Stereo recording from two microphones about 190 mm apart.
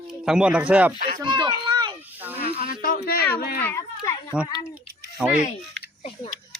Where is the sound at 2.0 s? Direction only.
10° right (ahead or behind).